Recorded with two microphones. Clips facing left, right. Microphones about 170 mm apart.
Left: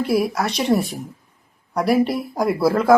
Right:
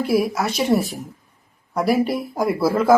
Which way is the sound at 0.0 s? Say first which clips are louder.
Even; centre (ahead or behind).